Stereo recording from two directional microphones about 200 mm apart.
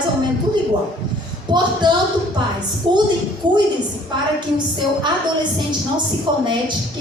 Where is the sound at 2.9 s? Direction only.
25° right (ahead or behind).